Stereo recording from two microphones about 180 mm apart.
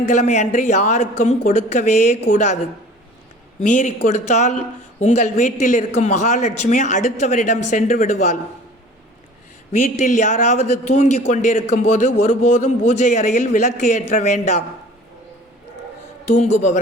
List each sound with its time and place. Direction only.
0.1 s a man's voice: 40° left (ahead or behind)
3.6 s a man's voice: 45° left (ahead or behind)
9.7 s a man's voice: 45° left (ahead or behind)
16.2 s a man's voice: 40° left (ahead or behind)